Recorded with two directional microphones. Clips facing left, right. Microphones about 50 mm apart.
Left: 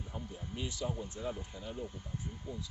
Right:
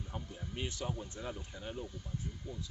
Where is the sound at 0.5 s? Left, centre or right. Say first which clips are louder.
Left 1 dB; right.